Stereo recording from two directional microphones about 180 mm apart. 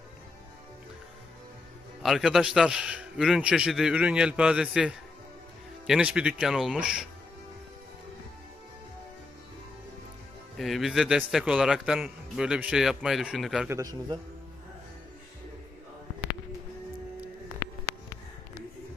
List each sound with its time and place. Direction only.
2.0 s a man's voice: centre (ahead or behind)
10.6 s a man's voice: centre (ahead or behind)
13.7 s a man's voice: 20° right (ahead or behind)